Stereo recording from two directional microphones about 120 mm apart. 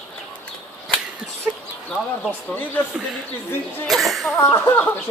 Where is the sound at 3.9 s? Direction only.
Centre (ahead or behind).